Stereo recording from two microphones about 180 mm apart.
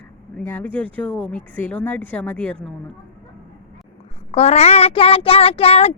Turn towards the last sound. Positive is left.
turn(degrees=35)  # may be behind; listen again after turning